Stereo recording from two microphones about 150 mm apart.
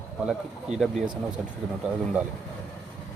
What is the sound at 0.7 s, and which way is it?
Speech, 50° right (ahead or behind).